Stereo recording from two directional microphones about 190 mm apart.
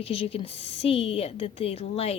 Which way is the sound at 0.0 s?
30° left (ahead or behind).